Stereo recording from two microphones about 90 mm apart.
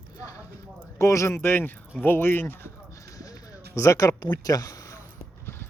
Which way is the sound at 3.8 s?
40° left (ahead or behind).